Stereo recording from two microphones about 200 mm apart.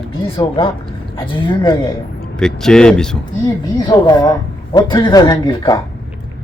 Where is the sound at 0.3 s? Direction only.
25° left (ahead or behind).